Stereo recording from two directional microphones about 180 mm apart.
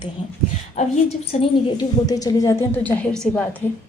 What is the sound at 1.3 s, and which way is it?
Speech, 40° left (ahead or behind).